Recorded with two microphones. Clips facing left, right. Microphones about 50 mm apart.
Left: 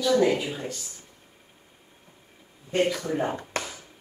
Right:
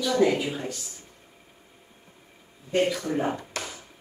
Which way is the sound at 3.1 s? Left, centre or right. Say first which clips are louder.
Even; centre.